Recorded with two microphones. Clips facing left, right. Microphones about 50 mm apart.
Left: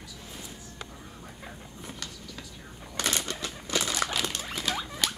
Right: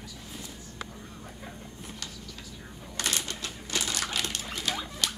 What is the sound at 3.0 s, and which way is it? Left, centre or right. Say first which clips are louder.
Typewriter: left 2 dB; left.